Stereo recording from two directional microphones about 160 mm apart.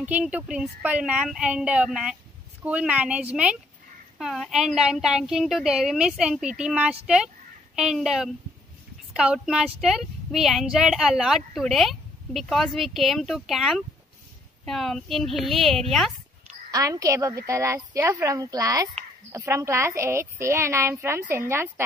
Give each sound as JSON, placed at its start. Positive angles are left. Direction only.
{"t": 0.0, "sound": "a woman's voice", "side_deg": -10}
{"t": 16.7, "sound": "a woman's voice", "side_deg": -20}